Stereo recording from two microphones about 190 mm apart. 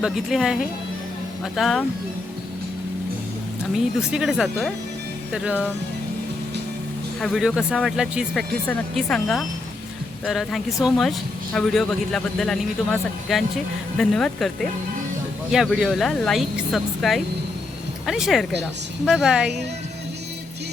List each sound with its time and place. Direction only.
0.0 s speech: centre (ahead or behind)
3.9 s speech: 5° right (ahead or behind)
7.2 s speech: centre (ahead or behind)